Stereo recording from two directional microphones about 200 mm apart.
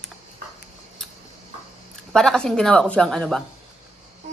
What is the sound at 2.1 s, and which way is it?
Speech, 5° left (ahead or behind).